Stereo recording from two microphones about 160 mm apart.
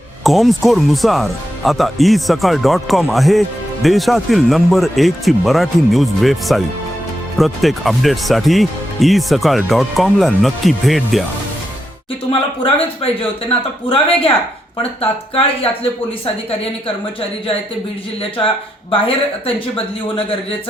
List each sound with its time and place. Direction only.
0.3 s speech: centre (ahead or behind)
12.3 s a man's voice: 35° left (ahead or behind)
19.5 s a man's voice: 35° left (ahead or behind)